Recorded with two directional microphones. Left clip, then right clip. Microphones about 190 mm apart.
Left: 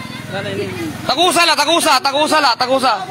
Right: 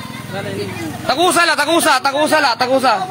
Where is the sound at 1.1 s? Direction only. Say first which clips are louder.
Left 1 dB; 15° right (ahead or behind).